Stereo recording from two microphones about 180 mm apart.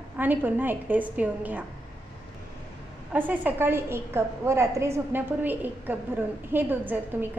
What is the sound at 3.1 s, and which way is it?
A woman's voice, 10° right (ahead or behind).